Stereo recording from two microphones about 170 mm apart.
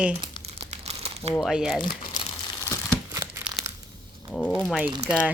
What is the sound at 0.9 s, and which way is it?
Crumpling, 35° right (ahead or behind).